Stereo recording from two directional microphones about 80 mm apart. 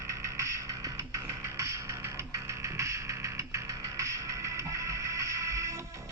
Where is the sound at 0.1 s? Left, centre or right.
Right.